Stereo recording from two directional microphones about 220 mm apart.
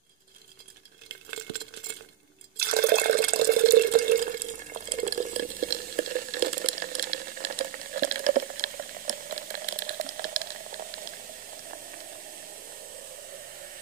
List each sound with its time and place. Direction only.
2.5 s water: 45° right (ahead or behind)